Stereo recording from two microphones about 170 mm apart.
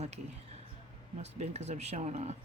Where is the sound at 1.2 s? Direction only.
40° right (ahead or behind).